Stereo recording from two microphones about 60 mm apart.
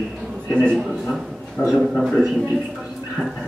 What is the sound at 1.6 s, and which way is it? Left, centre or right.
Speech, centre.